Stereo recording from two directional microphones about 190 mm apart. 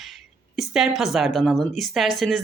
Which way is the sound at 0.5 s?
Centre (ahead or behind).